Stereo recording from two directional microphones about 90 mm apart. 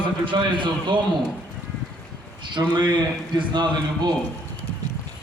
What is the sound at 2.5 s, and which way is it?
A man's voice, 55° right (ahead or behind).